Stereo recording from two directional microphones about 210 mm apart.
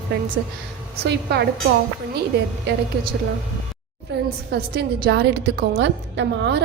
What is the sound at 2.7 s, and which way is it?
Speech, 50° right (ahead or behind).